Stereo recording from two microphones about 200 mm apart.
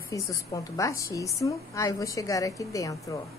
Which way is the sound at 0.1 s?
15° left (ahead or behind).